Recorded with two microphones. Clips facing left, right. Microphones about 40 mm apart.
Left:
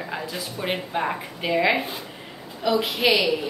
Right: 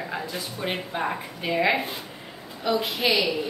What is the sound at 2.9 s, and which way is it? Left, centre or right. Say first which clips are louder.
Speech: left 3 dB; centre.